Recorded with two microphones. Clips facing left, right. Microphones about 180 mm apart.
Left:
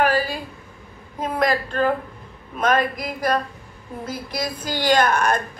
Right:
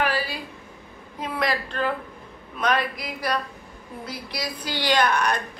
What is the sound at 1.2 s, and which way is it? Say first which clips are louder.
Speech: left 5 dB; 45° left (ahead or behind).